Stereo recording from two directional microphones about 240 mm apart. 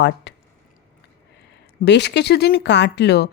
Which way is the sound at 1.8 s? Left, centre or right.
Left.